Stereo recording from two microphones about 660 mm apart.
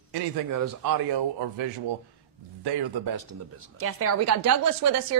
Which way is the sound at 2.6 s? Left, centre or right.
Right.